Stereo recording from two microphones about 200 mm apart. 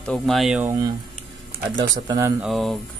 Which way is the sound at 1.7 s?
20° right (ahead or behind).